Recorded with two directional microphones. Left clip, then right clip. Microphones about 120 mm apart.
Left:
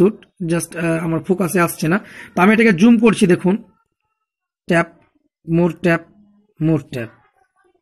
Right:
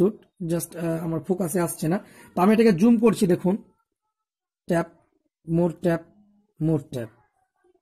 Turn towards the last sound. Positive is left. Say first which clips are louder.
# left 6 dB
turn(degrees=-25)  # may be behind; listen again after turning